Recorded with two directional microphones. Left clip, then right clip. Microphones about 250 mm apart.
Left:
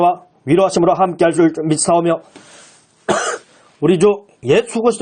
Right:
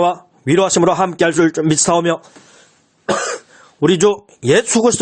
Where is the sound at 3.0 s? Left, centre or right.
Centre.